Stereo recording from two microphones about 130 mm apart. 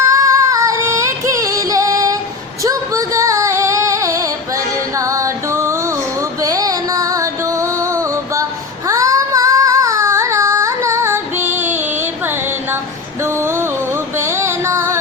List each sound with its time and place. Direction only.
0.0 s music: 25° right (ahead or behind)
2.6 s female singing: 25° right (ahead or behind)
4.9 s music: 25° right (ahead or behind)
8.9 s child singing: 25° right (ahead or behind)
14.2 s music: 20° right (ahead or behind)